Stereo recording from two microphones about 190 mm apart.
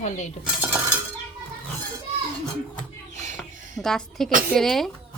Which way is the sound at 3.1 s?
40° right (ahead or behind).